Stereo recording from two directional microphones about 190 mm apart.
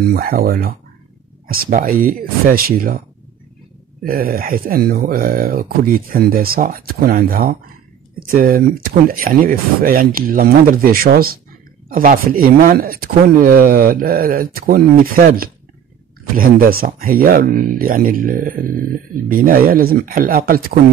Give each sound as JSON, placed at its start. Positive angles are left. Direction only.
{"t": 0.0, "sound": "speech", "side_deg": -50}
{"t": 4.0, "sound": "speech", "side_deg": -50}